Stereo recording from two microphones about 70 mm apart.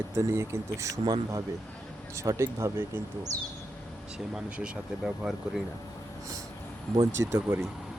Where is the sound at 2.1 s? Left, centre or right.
Right.